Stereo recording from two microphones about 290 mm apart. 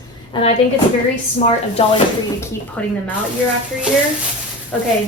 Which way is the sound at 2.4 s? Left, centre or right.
Centre.